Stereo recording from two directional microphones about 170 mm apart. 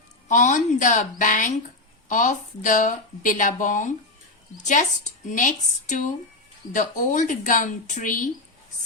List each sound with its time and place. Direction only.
0.3 s speech: 45° left (ahead or behind)